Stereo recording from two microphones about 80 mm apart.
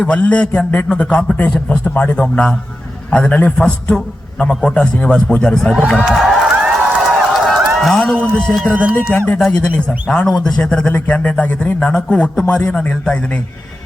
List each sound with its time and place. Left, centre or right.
0.0 s a man's voice: centre
6.1 s a sound: centre
7.2 s run: centre
7.9 s a man's voice: centre
9.1 s a man's voice: left